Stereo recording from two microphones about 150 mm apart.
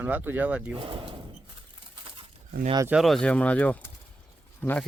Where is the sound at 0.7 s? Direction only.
35° right (ahead or behind).